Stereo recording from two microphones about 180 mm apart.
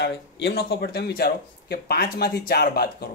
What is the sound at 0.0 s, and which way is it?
Speech, 65° left (ahead or behind).